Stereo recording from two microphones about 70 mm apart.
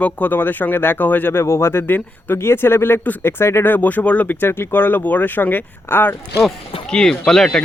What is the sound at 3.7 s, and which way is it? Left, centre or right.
Speech, left.